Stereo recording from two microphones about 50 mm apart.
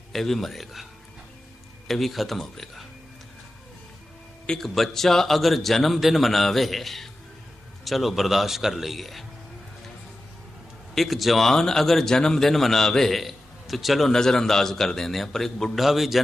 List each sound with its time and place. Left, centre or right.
0.1 s speech: centre
1.9 s speech: centre
4.6 s speech: centre
10.9 s speech: centre
14.1 s a man's voice: centre
15.8 s speech: centre